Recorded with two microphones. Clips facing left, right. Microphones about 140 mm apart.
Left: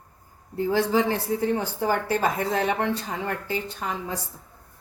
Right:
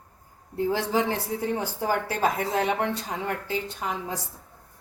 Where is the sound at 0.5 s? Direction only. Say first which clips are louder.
Left 3 dB; 10° right (ahead or behind).